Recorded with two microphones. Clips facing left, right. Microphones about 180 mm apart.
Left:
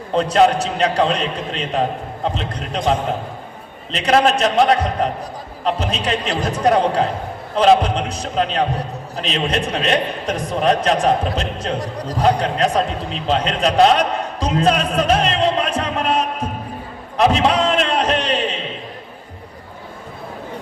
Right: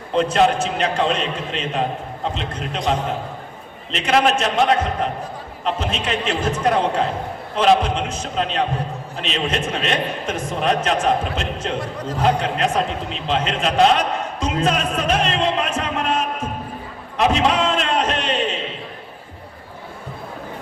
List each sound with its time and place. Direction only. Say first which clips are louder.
0.1 s a man's voice: left 2 dB; 35° left (ahead or behind)
3.9 s a man's voice: left 2 dB; 35° left (ahead or behind)
17.2 s a sound: left 2 dB; 35° left (ahead or behind)